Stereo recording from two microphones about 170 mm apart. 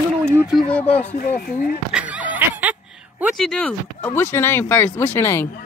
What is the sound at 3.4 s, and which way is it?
Speech, 5° left (ahead or behind).